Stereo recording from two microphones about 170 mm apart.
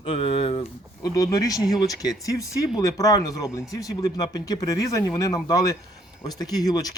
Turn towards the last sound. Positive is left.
turn(degrees=20)  # may be behind; listen again after turning